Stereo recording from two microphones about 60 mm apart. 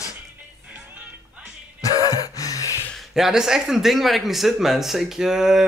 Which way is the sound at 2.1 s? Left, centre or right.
Left.